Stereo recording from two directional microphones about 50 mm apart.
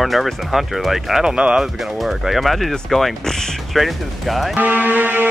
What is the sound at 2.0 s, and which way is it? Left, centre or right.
Speech, centre.